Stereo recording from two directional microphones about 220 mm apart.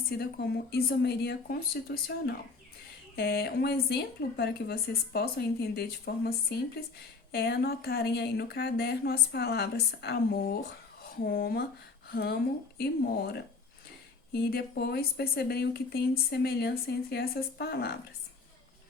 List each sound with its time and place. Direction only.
0.2 s speech: 45° left (ahead or behind)
14.3 s speech: 45° left (ahead or behind)